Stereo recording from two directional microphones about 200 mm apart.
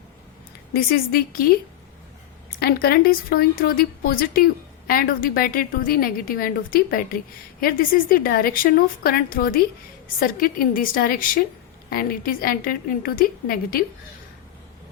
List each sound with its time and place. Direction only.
0.7 s a woman's voice: 50° left (ahead or behind)
2.6 s a woman's voice: 50° left (ahead or behind)